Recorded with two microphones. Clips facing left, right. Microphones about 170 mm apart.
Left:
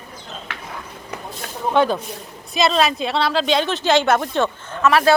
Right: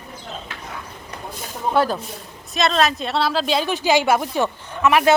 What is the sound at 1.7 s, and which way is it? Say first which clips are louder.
A woman's voice: left 2 dB; 5° right (ahead or behind).